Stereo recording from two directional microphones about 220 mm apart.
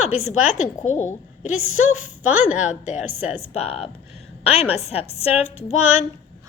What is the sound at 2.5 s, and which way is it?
Speech, 5° right (ahead or behind).